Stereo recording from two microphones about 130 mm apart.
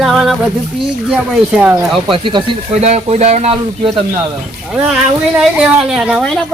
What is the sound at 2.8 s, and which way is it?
Speech, 55° right (ahead or behind).